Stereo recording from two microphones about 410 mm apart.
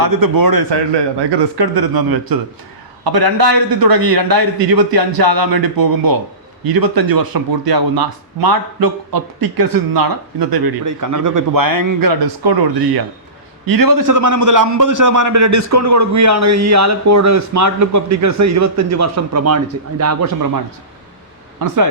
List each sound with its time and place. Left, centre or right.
0.0 s speech: right
13.7 s a man's voice: right
21.6 s speech: right